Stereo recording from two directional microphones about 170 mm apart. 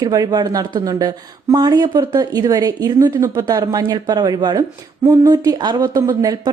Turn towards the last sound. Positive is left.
turn(degrees=-20)  # may be behind; listen again after turning